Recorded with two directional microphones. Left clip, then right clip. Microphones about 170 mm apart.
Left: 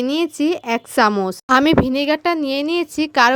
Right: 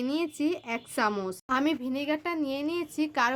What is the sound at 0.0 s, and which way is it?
Speech, 50° left (ahead or behind).